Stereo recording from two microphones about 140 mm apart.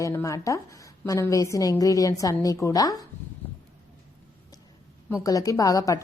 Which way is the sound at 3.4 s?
15° left (ahead or behind).